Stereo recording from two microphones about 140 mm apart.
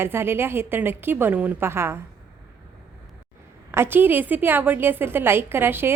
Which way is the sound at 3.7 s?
15° right (ahead or behind).